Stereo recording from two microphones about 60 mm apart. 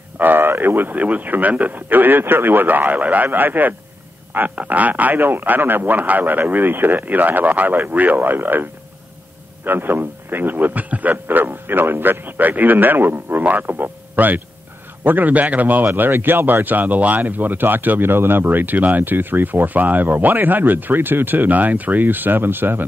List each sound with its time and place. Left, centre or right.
0.2 s a man's voice: right
9.7 s a man's voice: right